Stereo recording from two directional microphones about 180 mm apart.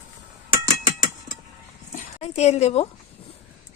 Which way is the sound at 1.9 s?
35° left (ahead or behind).